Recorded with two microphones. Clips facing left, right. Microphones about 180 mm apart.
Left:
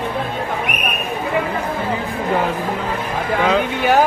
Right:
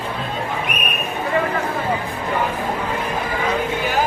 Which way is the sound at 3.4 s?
80° left.